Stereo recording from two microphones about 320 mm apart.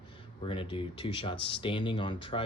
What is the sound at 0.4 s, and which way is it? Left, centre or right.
Speech, centre.